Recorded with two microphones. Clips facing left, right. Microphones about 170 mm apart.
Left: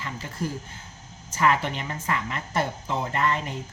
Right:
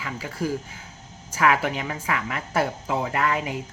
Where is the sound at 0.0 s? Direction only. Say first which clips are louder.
Right 3 dB; 10° right (ahead or behind).